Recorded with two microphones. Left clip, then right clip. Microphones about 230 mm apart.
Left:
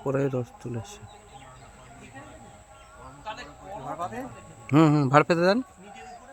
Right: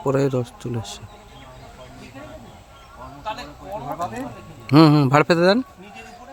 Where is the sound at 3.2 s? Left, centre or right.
Right.